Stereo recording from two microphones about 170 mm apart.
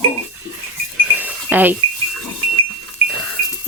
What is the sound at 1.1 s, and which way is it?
Alarm clock, 10° right (ahead or behind).